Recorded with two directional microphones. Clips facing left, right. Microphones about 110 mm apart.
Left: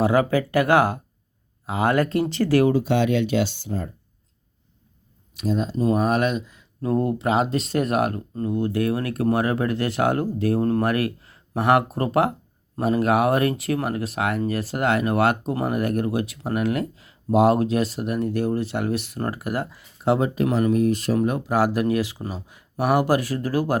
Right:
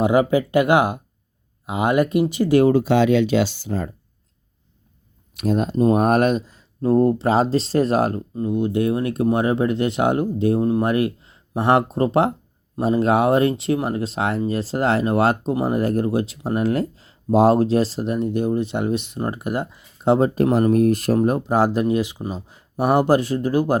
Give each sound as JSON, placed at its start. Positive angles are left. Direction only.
{"t": 0.0, "sound": "speech", "side_deg": -20}
{"t": 2.7, "sound": "speech", "side_deg": -90}
{"t": 5.4, "sound": "speech", "side_deg": -60}
{"t": 8.4, "sound": "speech", "side_deg": -20}
{"t": 20.1, "sound": "speech", "side_deg": -35}
{"t": 21.2, "sound": "speech", "side_deg": -30}